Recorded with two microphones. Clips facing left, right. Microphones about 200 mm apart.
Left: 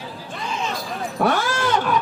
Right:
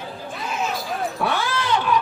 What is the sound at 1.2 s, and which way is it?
Cat, 45° left (ahead or behind).